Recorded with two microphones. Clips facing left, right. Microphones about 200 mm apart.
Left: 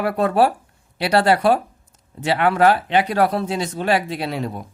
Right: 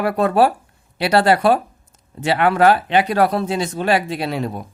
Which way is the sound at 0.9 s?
90° right.